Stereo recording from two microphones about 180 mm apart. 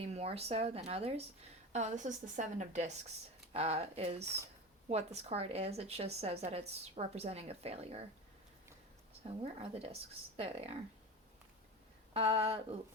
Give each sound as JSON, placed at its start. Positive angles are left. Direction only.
{"t": 0.0, "sound": "a woman's voice", "side_deg": -35}
{"t": 9.2, "sound": "a woman's voice", "side_deg": -30}
{"t": 12.1, "sound": "a woman's voice", "side_deg": -30}